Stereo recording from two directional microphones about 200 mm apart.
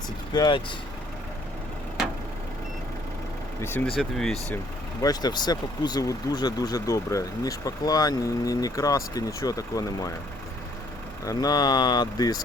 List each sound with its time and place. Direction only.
0.3 s speech: 20° left (ahead or behind)
3.6 s speech: 10° left (ahead or behind)
5.0 s speech: 20° left (ahead or behind)
11.3 s speech: 20° left (ahead or behind)